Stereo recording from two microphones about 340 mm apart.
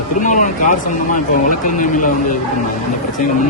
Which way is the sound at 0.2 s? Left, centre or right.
Left.